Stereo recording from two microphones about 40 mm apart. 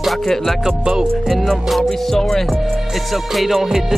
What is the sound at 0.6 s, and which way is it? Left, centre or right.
Music, centre.